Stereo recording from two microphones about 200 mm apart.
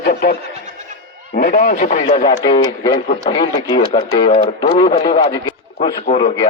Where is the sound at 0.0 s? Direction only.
50° left (ahead or behind).